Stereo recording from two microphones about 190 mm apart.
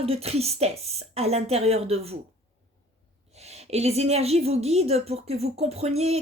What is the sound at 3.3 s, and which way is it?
A woman's voice, 35° right (ahead or behind).